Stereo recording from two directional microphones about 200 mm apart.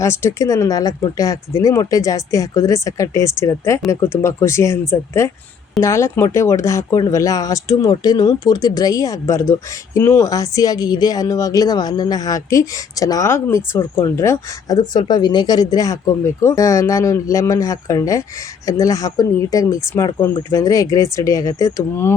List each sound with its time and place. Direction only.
0.0 s speech: 15° left (ahead or behind)